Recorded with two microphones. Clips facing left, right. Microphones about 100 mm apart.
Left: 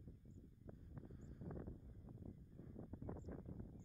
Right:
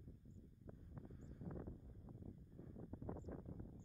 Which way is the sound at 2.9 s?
30° right (ahead or behind).